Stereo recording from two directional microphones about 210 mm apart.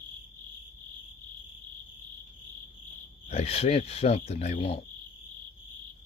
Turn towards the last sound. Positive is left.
turn(degrees=30)  # may be behind; listen again after turning